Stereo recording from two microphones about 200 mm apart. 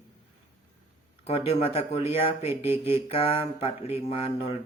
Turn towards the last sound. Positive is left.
turn(degrees=30)  # may be behind; listen again after turning